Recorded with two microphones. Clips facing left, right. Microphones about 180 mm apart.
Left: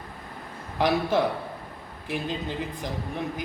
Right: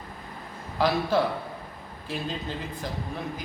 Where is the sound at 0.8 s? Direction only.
20° left (ahead or behind).